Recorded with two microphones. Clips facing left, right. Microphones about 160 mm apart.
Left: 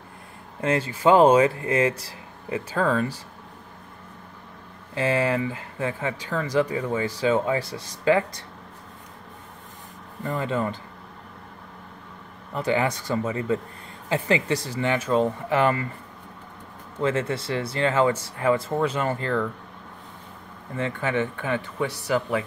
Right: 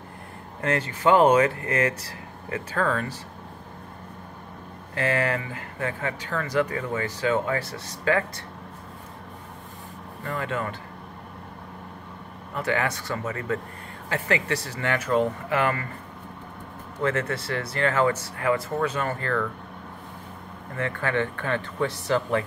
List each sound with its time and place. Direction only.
0.6 s speech: 20° left (ahead or behind)
4.9 s speech: 20° left (ahead or behind)
10.2 s speech: 20° left (ahead or behind)
12.5 s speech: 20° left (ahead or behind)
17.0 s speech: 25° left (ahead or behind)
20.7 s speech: 20° left (ahead or behind)